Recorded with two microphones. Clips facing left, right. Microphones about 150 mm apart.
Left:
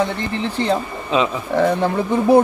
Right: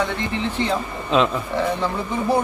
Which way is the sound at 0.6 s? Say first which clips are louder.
Left 5 dB; 35° left (ahead or behind).